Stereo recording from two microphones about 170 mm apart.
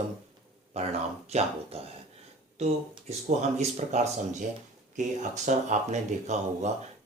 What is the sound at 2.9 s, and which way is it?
Speech, 40° right (ahead or behind).